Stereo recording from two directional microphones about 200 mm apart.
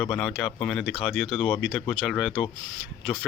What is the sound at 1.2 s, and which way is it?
Speech, 25° left (ahead or behind).